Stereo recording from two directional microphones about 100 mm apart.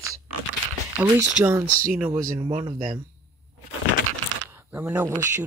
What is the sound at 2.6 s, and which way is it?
Speech, 65° right (ahead or behind).